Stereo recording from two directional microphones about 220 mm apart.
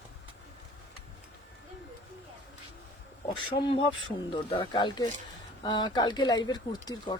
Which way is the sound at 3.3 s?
25° left (ahead or behind).